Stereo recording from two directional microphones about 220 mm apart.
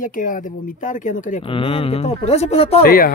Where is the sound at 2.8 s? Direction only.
45° left (ahead or behind).